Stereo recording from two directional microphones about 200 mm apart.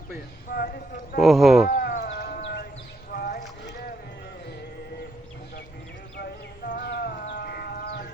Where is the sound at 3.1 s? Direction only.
50° left (ahead or behind).